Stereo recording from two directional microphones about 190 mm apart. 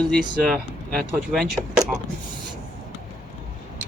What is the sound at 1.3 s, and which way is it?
Speech, centre (ahead or behind).